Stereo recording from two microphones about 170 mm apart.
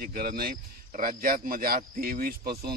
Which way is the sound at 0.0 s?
55° right (ahead or behind).